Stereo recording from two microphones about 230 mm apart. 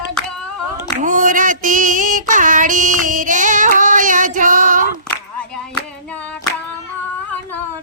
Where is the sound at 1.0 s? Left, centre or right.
Right.